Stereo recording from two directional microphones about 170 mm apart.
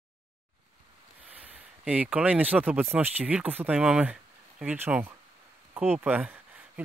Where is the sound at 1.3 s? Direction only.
10° right (ahead or behind).